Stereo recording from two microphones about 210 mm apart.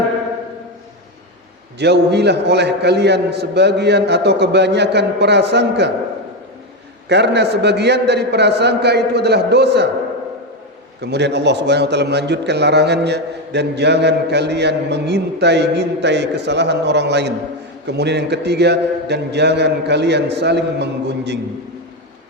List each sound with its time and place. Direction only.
1.8 s a man's voice: 55° right (ahead or behind)
7.1 s a man's voice: 55° right (ahead or behind)
11.0 s a man's voice: 55° right (ahead or behind)